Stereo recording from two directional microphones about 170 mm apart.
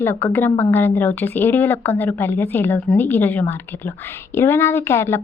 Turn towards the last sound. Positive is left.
turn(degrees=15)  # may be behind; listen again after turning